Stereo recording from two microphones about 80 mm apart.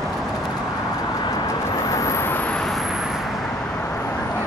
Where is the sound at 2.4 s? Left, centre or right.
Centre.